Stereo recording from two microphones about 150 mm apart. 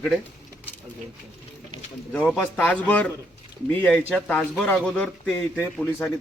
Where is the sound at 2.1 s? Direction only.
10° left (ahead or behind).